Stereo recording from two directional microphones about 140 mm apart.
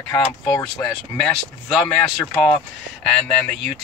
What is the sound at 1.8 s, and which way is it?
Speech, 15° left (ahead or behind).